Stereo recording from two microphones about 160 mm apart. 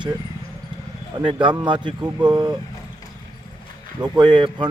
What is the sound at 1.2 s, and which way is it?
Speech, 30° right (ahead or behind).